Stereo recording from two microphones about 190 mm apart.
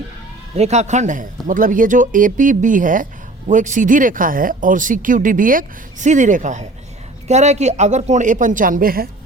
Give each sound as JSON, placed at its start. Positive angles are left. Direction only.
{"t": 0.5, "sound": "speech", "side_deg": -35}